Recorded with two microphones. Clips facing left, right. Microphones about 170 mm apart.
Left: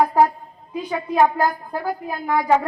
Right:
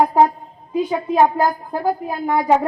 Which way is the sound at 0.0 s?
25° right (ahead or behind).